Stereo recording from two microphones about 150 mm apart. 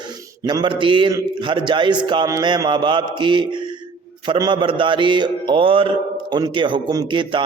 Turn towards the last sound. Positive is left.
turn(degrees=-30)  # may be behind; listen again after turning